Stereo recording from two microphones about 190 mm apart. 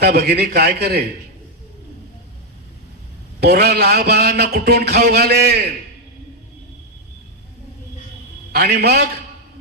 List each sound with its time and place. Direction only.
0.0 s music: 55° right (ahead or behind)
3.4 s music: 55° right (ahead or behind)
8.5 s music: 55° right (ahead or behind)